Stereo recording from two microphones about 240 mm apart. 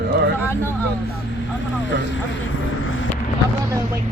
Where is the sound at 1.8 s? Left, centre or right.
Left.